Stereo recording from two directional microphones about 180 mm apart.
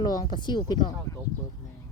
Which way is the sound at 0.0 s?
25° left (ahead or behind).